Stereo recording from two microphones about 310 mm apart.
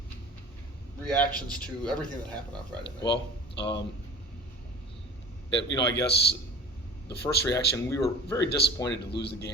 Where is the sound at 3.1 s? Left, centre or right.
Left.